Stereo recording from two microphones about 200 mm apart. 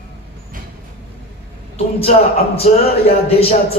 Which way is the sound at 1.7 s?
30° left (ahead or behind).